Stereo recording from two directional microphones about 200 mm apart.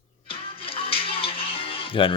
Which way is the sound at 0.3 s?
25° left (ahead or behind).